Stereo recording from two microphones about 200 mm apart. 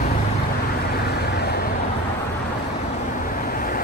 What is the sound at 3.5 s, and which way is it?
Vehicle, 45° left (ahead or behind).